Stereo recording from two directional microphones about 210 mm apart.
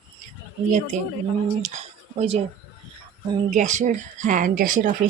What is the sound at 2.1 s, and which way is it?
Speech, 30° right (ahead or behind).